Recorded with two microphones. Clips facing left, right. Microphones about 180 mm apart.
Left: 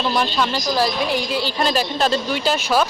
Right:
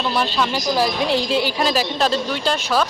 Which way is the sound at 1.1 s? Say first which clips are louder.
Right 3 dB; 25° right (ahead or behind).